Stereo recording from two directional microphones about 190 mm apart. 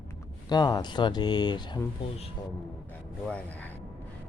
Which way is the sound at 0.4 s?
20° left (ahead or behind).